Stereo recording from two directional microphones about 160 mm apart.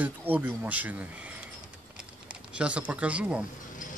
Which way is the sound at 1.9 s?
5° right (ahead or behind).